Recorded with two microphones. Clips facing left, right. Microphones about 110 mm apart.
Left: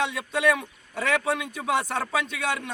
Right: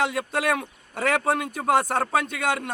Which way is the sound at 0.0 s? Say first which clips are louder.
Even; 50° right (ahead or behind).